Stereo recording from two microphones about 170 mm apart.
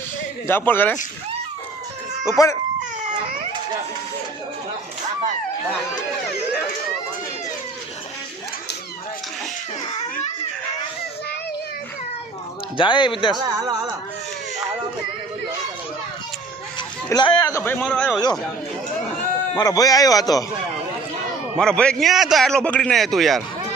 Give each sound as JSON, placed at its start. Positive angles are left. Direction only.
{"t": 0.4, "sound": "speech", "side_deg": 10}
{"t": 2.3, "sound": "speech", "side_deg": 15}
{"t": 12.7, "sound": "a man's voice", "side_deg": 30}
{"t": 13.3, "sound": "speech", "side_deg": -25}
{"t": 17.1, "sound": "speech", "side_deg": 25}
{"t": 19.5, "sound": "a man's voice", "side_deg": 20}
{"t": 21.6, "sound": "a man's voice", "side_deg": 5}